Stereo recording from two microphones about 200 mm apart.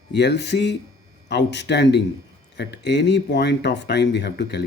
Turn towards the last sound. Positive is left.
turn(degrees=55)  # may be behind; listen again after turning